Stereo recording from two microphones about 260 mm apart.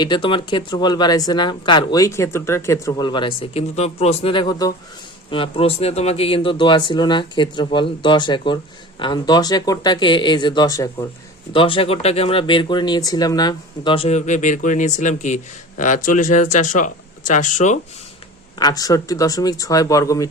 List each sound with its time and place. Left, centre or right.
0.0 s speech: centre
18.6 s speech: centre